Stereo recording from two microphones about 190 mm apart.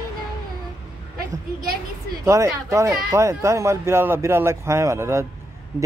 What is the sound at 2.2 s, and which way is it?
A man's voice, 15° right (ahead or behind).